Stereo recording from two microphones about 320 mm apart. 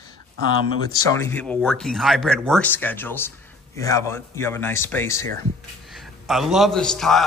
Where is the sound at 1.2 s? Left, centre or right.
Centre.